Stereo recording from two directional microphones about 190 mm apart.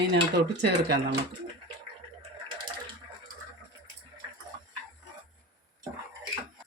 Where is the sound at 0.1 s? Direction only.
60° right (ahead or behind).